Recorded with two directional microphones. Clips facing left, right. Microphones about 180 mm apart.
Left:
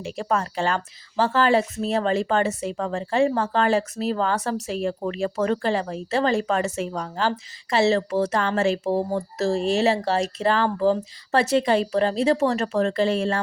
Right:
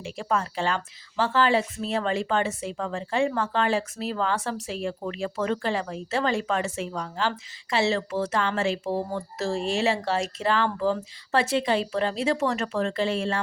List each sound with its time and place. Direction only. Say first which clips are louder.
0.0 s speech: left 3 dB; 45° left (ahead or behind)